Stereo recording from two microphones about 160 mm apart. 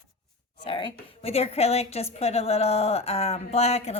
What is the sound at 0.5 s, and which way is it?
A woman's voice, 30° left (ahead or behind).